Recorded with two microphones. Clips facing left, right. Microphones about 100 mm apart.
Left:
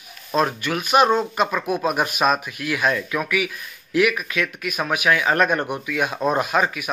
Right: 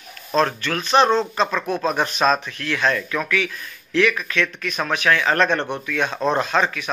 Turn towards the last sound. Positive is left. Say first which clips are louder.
# even
turn(degrees=10)  # may be behind; listen again after turning